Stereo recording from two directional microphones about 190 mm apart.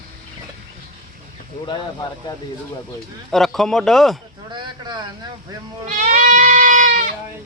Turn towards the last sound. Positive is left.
turn(degrees=-45)  # may be behind; listen again after turning